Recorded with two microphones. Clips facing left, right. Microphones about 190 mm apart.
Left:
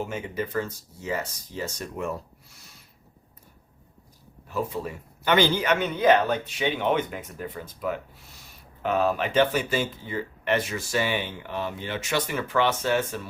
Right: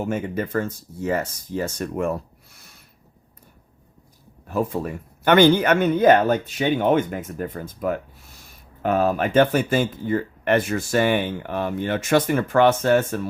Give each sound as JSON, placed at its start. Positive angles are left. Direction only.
{"t": 0.0, "sound": "speech", "side_deg": -50}
{"t": 4.4, "sound": "speech", "side_deg": -50}